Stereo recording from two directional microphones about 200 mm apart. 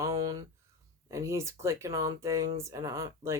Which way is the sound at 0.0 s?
20° right (ahead or behind).